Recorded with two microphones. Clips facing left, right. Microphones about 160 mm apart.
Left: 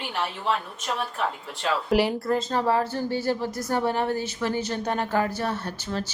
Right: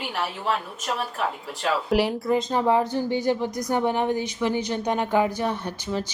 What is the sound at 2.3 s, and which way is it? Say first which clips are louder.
A woman's voice: right 4 dB; 15° right (ahead or behind).